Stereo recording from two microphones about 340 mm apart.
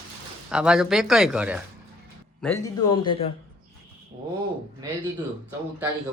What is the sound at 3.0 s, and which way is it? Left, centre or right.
Speech, centre.